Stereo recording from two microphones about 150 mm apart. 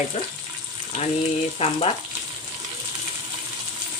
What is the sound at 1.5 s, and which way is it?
Speech, 45° left (ahead or behind).